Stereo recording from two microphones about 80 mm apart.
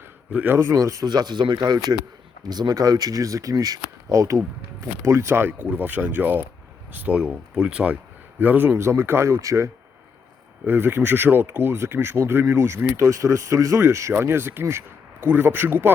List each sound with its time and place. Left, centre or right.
0.3 s speech: right
0.5 s speech: right; by 7.9 s centre
8.4 s speech: right
10.7 s speech: right